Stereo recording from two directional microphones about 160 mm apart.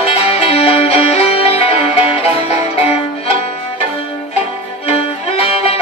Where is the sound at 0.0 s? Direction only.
40° left (ahead or behind).